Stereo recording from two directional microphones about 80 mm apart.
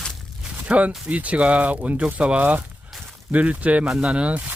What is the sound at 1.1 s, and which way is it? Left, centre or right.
Speech, centre.